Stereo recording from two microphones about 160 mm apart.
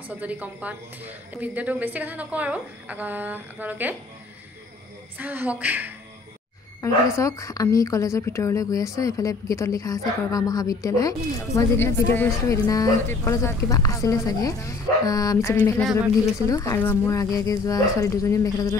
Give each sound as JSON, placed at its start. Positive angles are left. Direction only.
{"t": 0.1, "sound": "a woman's voice", "side_deg": -10}
{"t": 5.1, "sound": "a woman's voice", "side_deg": -10}
{"t": 7.2, "sound": "speech", "side_deg": 20}
{"t": 15.5, "sound": "speech", "side_deg": 10}
{"t": 16.4, "sound": "speech", "side_deg": 20}